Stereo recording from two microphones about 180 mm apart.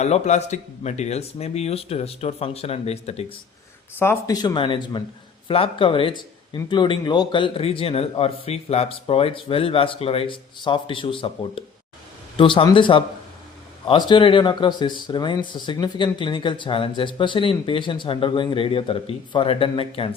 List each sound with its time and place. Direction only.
0.0 s a man's voice: 40° left (ahead or behind)
3.9 s a man's voice: 15° left (ahead or behind); by 20.1 s 30° left (ahead or behind)